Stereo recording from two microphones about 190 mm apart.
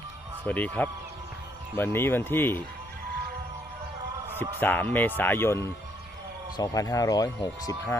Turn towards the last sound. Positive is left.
turn(degrees=20)  # may be behind; listen again after turning